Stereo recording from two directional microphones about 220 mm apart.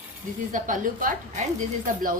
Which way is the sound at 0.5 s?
35° right (ahead or behind).